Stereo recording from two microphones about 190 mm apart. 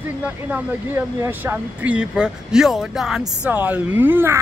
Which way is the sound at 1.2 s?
10° right (ahead or behind).